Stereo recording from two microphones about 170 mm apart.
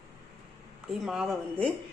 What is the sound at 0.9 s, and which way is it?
Speech, centre (ahead or behind).